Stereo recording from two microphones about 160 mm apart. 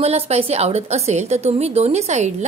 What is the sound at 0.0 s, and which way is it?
A woman's voice, 40° right (ahead or behind).